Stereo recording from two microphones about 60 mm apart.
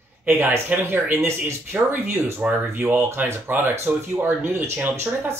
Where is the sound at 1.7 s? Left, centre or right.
Centre.